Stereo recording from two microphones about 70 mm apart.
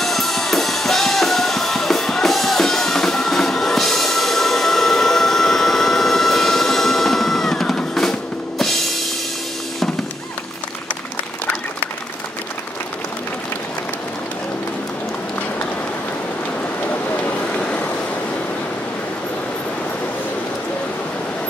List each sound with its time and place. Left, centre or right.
0.0 s music: centre
16.9 s vehicle: left